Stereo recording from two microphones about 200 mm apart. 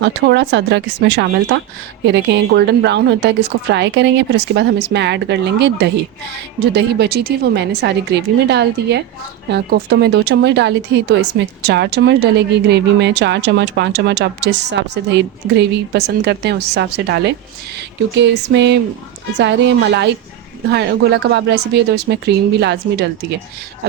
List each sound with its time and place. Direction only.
0.0 s speech: 60° right (ahead or behind)